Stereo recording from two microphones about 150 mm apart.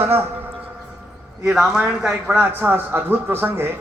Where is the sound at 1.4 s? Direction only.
Centre (ahead or behind).